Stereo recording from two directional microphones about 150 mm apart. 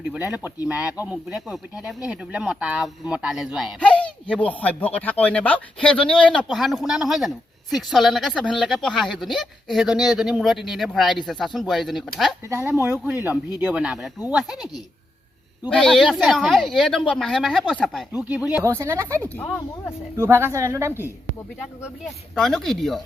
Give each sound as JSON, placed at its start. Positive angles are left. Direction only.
{"t": 0.1, "sound": "speech", "side_deg": -5}
{"t": 3.8, "sound": "speech", "side_deg": 10}
{"t": 12.5, "sound": "speech", "side_deg": -15}
{"t": 15.7, "sound": "speech", "side_deg": 5}
{"t": 18.6, "sound": "speech", "side_deg": -20}
{"t": 22.4, "sound": "speech", "side_deg": 5}